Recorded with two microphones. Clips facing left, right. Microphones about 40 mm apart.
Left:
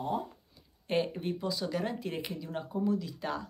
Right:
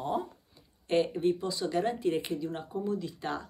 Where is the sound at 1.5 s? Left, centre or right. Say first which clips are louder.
Right 3 dB; centre.